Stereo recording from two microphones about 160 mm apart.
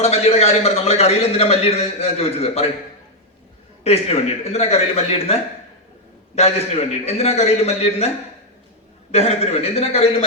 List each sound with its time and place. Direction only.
0.0 s a man's voice: 40° left (ahead or behind)
3.8 s a man's voice: 40° left (ahead or behind)
9.1 s a man's voice: 40° left (ahead or behind)